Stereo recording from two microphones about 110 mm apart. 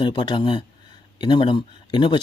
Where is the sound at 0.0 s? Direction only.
45° left (ahead or behind).